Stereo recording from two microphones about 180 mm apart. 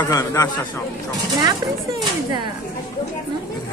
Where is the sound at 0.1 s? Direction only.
20° left (ahead or behind).